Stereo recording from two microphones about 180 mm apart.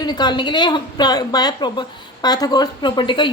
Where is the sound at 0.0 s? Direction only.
25° left (ahead or behind).